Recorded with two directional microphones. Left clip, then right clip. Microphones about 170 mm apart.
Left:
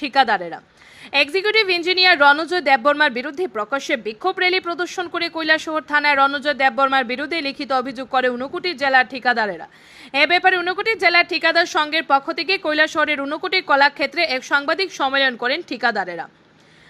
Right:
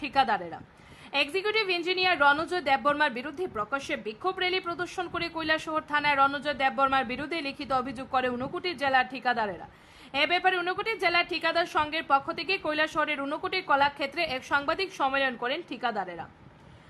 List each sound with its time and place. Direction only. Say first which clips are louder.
0.0 s speech: left 9 dB; 15° left (ahead or behind)